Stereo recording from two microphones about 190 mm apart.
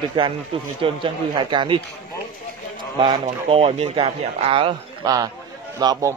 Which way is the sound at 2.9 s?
20° right (ahead or behind).